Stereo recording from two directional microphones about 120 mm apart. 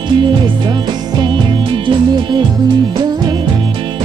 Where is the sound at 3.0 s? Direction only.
35° right (ahead or behind).